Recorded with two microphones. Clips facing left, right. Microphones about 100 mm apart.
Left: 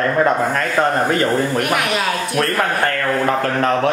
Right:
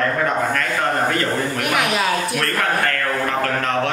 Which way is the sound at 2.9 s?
25° left (ahead or behind).